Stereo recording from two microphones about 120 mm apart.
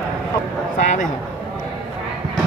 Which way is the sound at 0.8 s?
90° left.